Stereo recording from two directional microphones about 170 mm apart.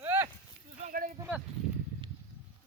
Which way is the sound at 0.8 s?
55° right (ahead or behind).